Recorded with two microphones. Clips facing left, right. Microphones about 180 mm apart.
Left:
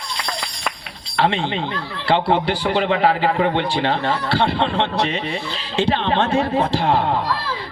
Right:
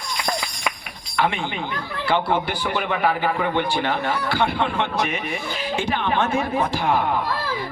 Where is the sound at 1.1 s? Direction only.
30° left (ahead or behind).